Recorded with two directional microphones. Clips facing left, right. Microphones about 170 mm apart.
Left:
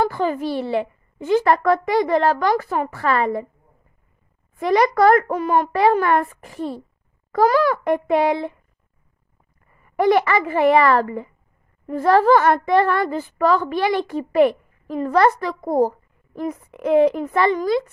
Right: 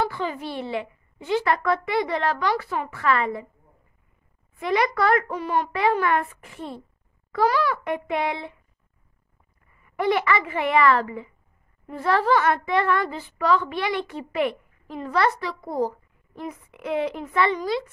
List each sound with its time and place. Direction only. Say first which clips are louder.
0.0 s a woman's voice: left 6 dB; 45° left (ahead or behind)
4.6 s a woman's voice: left 6 dB; 40° left (ahead or behind)
9.8 s a woman's voice: left 5 dB; 40° left (ahead or behind)